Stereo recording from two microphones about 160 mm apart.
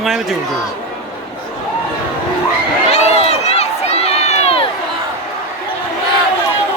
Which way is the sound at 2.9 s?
40° left (ahead or behind).